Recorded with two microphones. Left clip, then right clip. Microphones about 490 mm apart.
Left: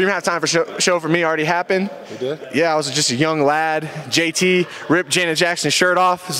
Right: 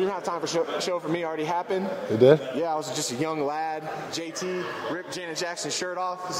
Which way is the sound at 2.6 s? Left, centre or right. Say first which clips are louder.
Left 10 dB; left.